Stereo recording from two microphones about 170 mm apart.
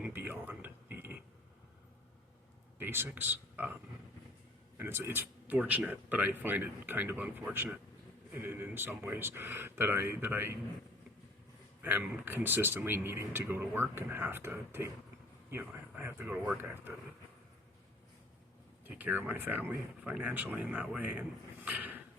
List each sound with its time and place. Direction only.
0.0 s a sound: 10° right (ahead or behind)
2.7 s speech: 15° right (ahead or behind)
4.8 s speech: 15° right (ahead or behind)
11.8 s speech: 10° right (ahead or behind)
18.9 s speech: 10° right (ahead or behind)